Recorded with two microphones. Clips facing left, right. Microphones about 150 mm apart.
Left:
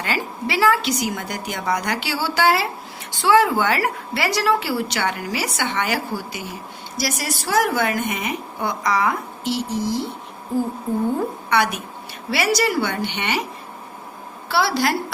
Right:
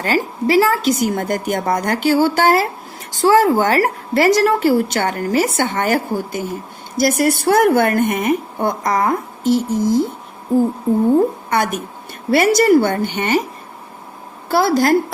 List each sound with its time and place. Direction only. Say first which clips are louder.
0.0 s a woman's voice: right 7 dB; 40° right (ahead or behind)
11.4 s a woman's voice: right 2 dB; 45° right (ahead or behind)
14.5 s a woman's voice: right 6 dB; 45° right (ahead or behind)